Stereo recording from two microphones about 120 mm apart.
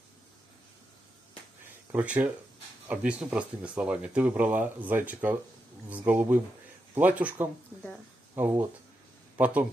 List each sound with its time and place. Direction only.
1.9 s speech: 10° right (ahead or behind)